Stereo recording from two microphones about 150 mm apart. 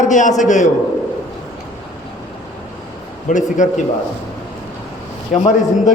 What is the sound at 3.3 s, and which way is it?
Speech, 55° left (ahead or behind).